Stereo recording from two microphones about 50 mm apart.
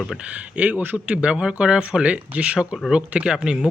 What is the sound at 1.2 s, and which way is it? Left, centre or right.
Speech, centre.